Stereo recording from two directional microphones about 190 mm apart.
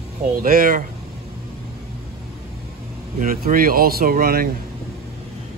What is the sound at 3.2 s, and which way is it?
Speech, 45° right (ahead or behind).